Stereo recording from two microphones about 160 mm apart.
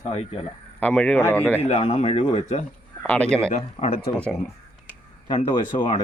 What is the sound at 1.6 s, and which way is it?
Speech, 45° left (ahead or behind).